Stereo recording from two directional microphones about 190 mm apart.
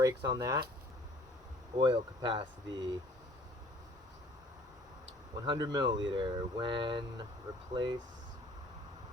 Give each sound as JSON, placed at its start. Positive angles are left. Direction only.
{"t": 0.0, "sound": "speech", "side_deg": -20}
{"t": 1.7, "sound": "speech", "side_deg": -25}
{"t": 5.5, "sound": "speech", "side_deg": -20}